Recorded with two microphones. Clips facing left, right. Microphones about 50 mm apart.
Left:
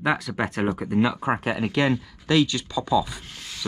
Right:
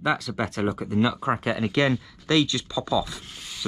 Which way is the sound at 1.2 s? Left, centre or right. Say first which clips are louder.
Even; left.